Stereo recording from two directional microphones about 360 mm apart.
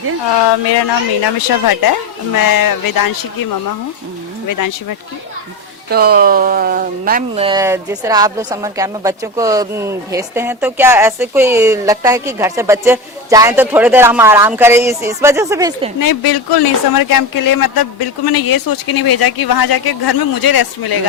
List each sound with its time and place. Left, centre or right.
0.5 s speech: left
4.4 s speech: left
5.9 s speech: right; by 15.9 s centre
16.0 s speech: left